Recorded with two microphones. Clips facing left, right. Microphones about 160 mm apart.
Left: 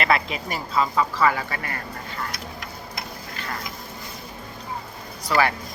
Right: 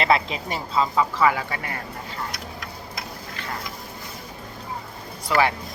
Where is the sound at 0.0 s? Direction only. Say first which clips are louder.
Right 1 dB; 25° right (ahead or behind).